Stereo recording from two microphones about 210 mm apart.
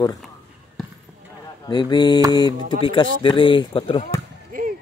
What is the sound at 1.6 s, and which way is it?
Speech, 20° left (ahead or behind).